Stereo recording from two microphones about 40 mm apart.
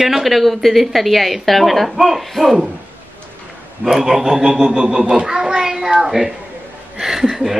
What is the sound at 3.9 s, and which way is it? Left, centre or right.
A man's voice, centre.